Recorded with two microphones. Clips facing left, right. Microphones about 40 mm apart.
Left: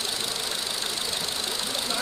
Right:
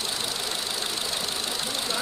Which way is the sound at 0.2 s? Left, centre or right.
Centre.